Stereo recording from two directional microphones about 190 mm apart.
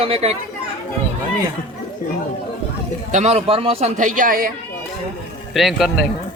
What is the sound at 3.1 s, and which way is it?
A man's voice, 35° right (ahead or behind).